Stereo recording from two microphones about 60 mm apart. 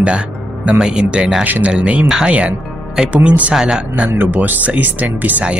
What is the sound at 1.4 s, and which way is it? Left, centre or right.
A man's voice, right.